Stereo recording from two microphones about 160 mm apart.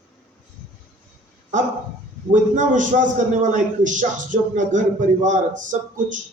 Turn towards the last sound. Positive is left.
turn(degrees=-55)  # may be behind; listen again after turning